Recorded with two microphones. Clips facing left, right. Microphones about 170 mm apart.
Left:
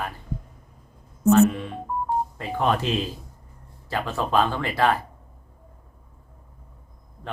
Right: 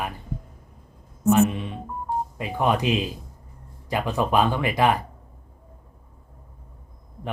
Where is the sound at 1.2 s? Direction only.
15° right (ahead or behind).